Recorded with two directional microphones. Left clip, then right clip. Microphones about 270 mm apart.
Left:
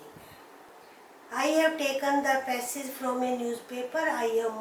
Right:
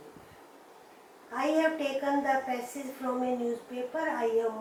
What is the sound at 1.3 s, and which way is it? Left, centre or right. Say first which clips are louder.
A woman's voice: left 2 dB; centre.